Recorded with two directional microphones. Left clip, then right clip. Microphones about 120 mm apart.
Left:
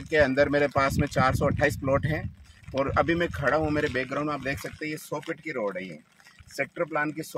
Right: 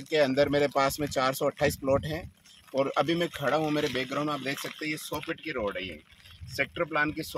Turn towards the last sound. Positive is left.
turn(degrees=35)  # may be behind; listen again after turning